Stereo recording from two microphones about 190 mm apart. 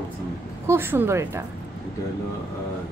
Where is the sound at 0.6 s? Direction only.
10° right (ahead or behind).